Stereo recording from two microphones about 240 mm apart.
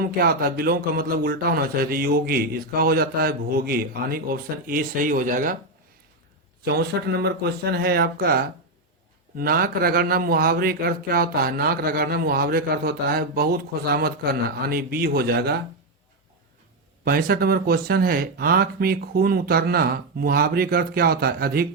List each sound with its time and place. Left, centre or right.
0.0 s speech: right
6.7 s speech: right
17.0 s speech: right